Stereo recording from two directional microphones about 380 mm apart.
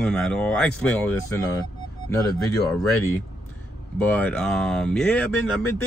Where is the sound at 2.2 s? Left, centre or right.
Centre.